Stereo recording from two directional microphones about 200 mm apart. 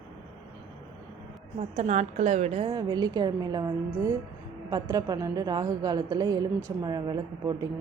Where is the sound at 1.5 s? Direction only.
30° right (ahead or behind).